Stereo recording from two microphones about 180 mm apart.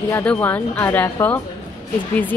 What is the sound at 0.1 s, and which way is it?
Speech, 10° left (ahead or behind).